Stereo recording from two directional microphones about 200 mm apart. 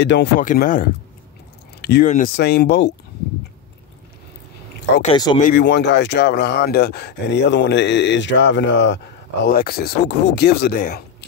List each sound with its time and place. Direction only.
0.0 s speech: 60° left (ahead or behind)
0.4 s speech: 40° left (ahead or behind)
1.8 s a sound: 55° left (ahead or behind)
2.0 s speech: 40° left (ahead or behind)
2.3 s speech: 55° left (ahead or behind)
5.1 s speech: 20° left (ahead or behind)
5.5 s speech: 60° left (ahead or behind)